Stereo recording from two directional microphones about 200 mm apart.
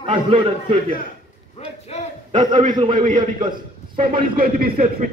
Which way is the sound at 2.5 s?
25° right (ahead or behind).